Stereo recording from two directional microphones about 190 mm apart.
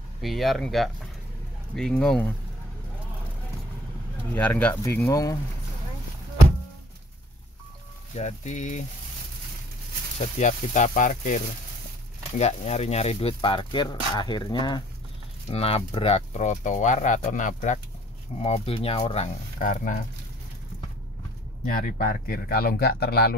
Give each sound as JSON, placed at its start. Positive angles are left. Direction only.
{"t": 0.2, "sound": "speech", "side_deg": 0}
{"t": 4.4, "sound": "speech", "side_deg": 5}
{"t": 8.2, "sound": "speech", "side_deg": 35}
{"t": 10.4, "sound": "speech", "side_deg": 40}
{"t": 18.4, "sound": "speech", "side_deg": 30}
{"t": 19.6, "sound": "speech", "side_deg": 45}
{"t": 21.6, "sound": "speech", "side_deg": 45}